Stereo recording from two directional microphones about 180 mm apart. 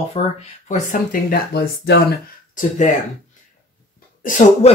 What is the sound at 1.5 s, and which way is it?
Speech, 60° left (ahead or behind).